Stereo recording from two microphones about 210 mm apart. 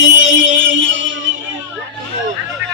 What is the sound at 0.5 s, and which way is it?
Music, 65° right (ahead or behind).